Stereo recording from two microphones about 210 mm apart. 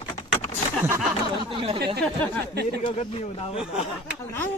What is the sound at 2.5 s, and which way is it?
Speech, 50° right (ahead or behind).